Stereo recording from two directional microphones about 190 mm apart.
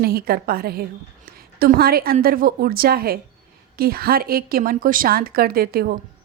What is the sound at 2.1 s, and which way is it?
A woman's voice, 50° right (ahead or behind).